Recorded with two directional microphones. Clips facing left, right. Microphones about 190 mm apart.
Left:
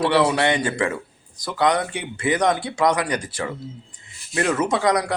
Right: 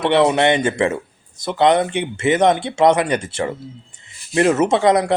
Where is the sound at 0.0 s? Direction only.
25° right (ahead or behind).